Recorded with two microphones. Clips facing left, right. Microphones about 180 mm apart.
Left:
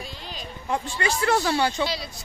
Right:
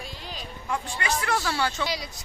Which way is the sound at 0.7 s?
30° left (ahead or behind).